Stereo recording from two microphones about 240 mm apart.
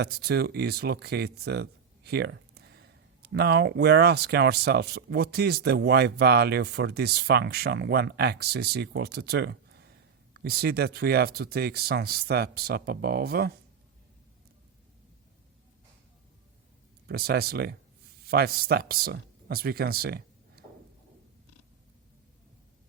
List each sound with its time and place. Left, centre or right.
0.0 s speech: right
17.1 s speech: right